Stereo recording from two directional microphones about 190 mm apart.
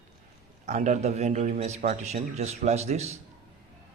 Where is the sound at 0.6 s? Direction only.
40° right (ahead or behind).